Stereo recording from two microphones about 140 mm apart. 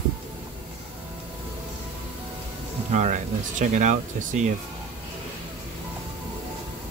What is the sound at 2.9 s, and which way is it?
Speech, 60° right (ahead or behind).